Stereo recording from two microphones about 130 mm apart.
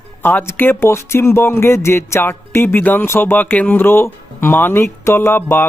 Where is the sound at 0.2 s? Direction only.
15° left (ahead or behind).